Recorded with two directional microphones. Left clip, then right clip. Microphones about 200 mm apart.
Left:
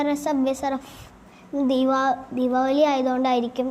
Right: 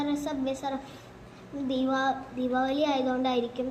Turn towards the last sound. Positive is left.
turn(degrees=55)  # may be behind; listen again after turning